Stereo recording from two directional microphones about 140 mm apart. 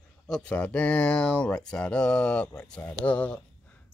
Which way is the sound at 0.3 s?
5° left (ahead or behind).